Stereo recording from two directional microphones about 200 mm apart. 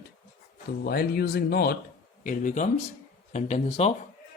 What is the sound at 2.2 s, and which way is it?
Speech, 40° left (ahead or behind).